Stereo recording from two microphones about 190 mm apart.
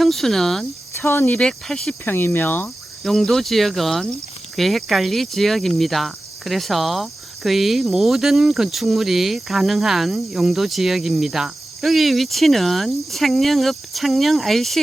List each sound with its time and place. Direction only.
0.0 s cricket: centre (ahead or behind)